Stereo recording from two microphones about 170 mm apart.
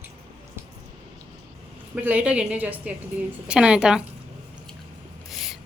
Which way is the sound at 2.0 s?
10° right (ahead or behind).